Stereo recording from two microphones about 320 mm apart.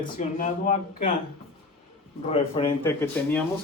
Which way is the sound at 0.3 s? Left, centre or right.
Left.